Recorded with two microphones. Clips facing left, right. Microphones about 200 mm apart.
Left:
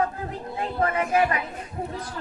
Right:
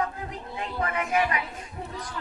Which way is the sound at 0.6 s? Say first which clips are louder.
Left 5 dB; 35° left (ahead or behind).